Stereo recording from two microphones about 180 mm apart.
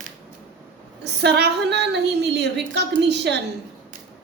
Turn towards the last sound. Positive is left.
turn(degrees=-70)  # may be behind; listen again after turning